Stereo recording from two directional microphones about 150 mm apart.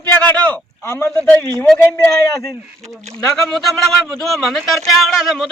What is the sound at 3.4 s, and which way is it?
A man's voice, 5° left (ahead or behind).